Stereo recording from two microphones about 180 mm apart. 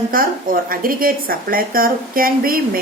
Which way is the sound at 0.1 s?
50° right (ahead or behind).